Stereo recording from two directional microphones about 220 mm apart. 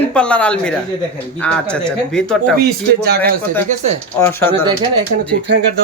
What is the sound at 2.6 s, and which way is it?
Speech, 45° right (ahead or behind).